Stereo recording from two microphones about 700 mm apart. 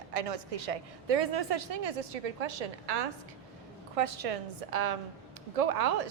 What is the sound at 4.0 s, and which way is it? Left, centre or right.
A woman's voice, right.